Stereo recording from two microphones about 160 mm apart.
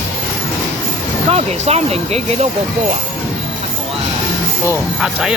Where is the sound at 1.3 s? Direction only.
40° right (ahead or behind).